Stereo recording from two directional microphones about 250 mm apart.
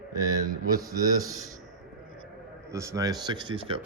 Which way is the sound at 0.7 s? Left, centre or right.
Centre.